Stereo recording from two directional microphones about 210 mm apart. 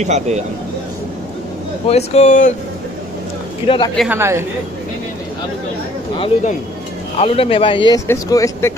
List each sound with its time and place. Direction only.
0.0 s speech: 35° right (ahead or behind)
1.9 s speech: 30° left (ahead or behind)
3.6 s speech: 25° left (ahead or behind)
4.1 s speech: 10° right (ahead or behind)
6.1 s speech: 25° left (ahead or behind)